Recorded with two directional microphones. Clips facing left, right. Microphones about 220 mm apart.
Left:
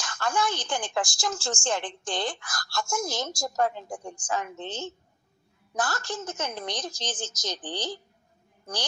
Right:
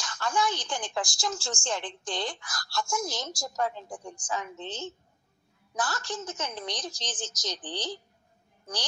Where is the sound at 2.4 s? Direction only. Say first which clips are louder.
Left 1 dB; 50° left (ahead or behind).